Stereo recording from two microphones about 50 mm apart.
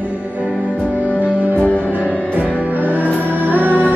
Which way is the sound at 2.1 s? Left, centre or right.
Right.